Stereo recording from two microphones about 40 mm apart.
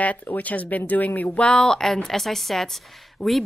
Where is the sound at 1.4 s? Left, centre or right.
Left.